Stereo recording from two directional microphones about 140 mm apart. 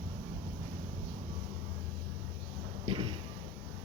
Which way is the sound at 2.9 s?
40° right (ahead or behind).